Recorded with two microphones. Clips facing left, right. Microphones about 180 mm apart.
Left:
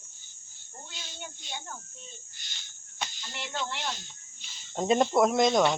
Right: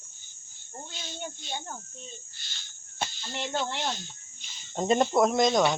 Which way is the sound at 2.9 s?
35° right (ahead or behind).